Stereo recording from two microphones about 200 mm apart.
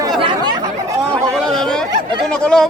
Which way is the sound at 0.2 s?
20° right (ahead or behind).